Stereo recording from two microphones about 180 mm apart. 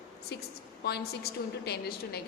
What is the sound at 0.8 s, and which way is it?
A woman's voice, 60° left (ahead or behind).